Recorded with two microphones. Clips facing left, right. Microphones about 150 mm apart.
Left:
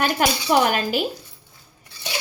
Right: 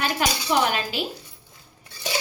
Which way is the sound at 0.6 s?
50° left (ahead or behind).